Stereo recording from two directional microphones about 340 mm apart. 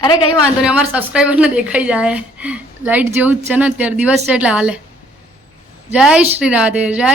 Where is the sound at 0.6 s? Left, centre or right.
Centre.